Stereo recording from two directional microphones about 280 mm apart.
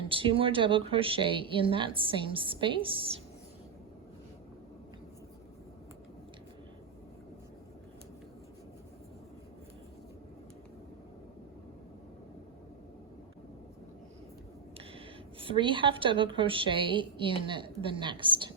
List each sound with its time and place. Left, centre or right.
0.0 s speech: centre
14.9 s speech: centre